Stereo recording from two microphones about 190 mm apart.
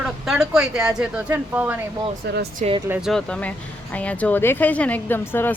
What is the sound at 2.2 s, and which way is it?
Speech, 60° right (ahead or behind).